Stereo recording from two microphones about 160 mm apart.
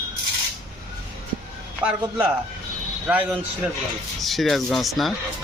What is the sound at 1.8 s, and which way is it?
A man's voice, 10° right (ahead or behind).